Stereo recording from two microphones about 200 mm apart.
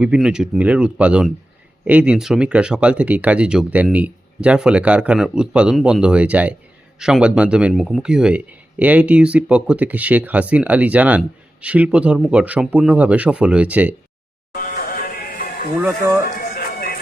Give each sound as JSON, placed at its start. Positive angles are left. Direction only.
{"t": 0.0, "sound": "speech", "side_deg": -5}
{"t": 14.5, "sound": "a sound", "side_deg": 45}
{"t": 15.8, "sound": "speech", "side_deg": -15}
{"t": 16.6, "sound": "music", "side_deg": 50}